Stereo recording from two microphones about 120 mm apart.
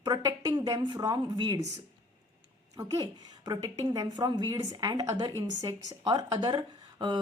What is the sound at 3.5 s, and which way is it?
A woman's voice, 30° right (ahead or behind).